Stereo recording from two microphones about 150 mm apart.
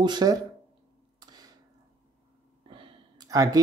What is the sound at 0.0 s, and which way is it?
Speech, 30° right (ahead or behind).